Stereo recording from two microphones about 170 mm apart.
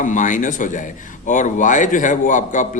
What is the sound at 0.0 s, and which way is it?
A man's voice, 50° left (ahead or behind).